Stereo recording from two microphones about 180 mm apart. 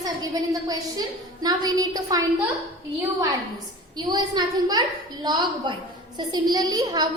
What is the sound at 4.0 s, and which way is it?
A woman's voice, 25° right (ahead or behind).